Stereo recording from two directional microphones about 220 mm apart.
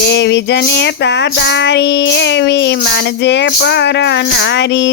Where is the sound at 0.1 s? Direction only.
50° left (ahead or behind).